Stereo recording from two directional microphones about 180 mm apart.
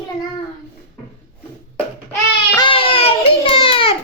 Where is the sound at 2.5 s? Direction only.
30° left (ahead or behind).